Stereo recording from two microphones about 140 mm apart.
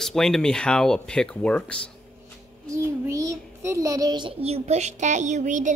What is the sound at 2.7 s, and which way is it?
A child's voice, 20° right (ahead or behind).